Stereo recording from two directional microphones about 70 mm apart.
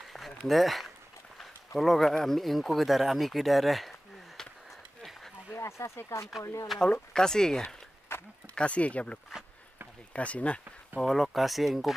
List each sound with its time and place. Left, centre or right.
0.5 s speech: centre
5.6 s speech: left
6.9 s speech: centre
8.1 s a sound: left
8.5 s speech: centre
11.0 s speech: centre